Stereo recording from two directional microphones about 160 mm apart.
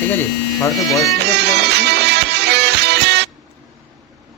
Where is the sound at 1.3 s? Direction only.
90° right.